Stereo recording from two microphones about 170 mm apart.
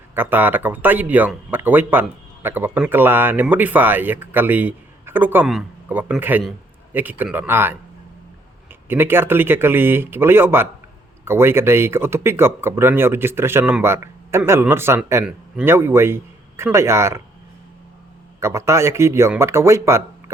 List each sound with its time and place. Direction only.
0.1 s speech: 10° right (ahead or behind)
8.9 s speech: 15° right (ahead or behind)
18.3 s speech: 15° right (ahead or behind)